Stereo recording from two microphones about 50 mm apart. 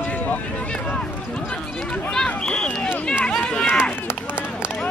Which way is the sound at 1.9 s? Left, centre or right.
Centre.